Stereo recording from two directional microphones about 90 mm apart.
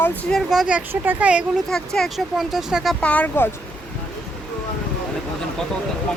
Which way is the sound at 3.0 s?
15° left (ahead or behind).